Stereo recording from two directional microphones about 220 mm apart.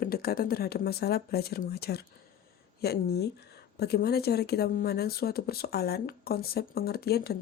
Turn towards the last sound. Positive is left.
turn(degrees=45)  # may be behind; listen again after turning